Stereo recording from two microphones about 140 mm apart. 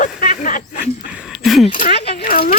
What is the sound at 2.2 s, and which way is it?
Speech, 85° left.